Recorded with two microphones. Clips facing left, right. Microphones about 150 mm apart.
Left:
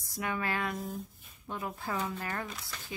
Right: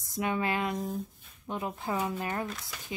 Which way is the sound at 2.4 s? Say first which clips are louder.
Right 4 dB; centre (ahead or behind).